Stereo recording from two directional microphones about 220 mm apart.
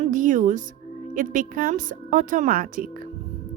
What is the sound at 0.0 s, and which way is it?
A woman's voice, 35° right (ahead or behind).